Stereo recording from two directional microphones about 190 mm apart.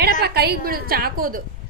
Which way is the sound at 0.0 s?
55° right (ahead or behind).